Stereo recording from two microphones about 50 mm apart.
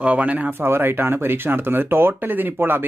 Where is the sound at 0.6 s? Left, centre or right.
Right.